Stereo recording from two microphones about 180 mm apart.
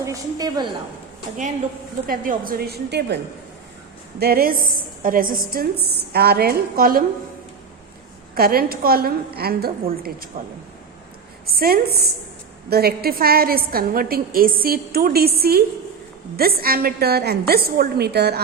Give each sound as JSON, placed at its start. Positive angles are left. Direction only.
{"t": 0.0, "sound": "a woman's voice", "side_deg": -20}
{"t": 2.0, "sound": "a woman's voice", "side_deg": -55}
{"t": 4.2, "sound": "a woman's voice", "side_deg": -55}
{"t": 8.4, "sound": "a woman's voice", "side_deg": -55}
{"t": 11.4, "sound": "a woman's voice", "side_deg": -60}